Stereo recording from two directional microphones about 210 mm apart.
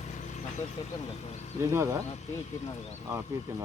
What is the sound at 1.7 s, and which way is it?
Speech, 15° right (ahead or behind).